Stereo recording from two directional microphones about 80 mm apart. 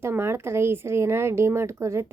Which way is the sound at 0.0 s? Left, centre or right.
Right.